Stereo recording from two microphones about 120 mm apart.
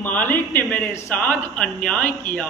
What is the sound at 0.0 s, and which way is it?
A man's voice, 15° left (ahead or behind).